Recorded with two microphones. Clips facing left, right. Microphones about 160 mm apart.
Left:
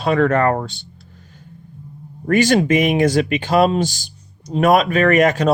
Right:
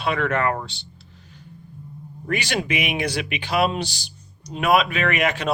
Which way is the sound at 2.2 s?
45° left (ahead or behind).